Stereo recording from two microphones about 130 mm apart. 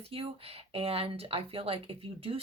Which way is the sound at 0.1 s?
45° right (ahead or behind).